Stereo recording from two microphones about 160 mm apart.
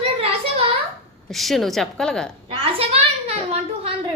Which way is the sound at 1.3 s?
Centre (ahead or behind).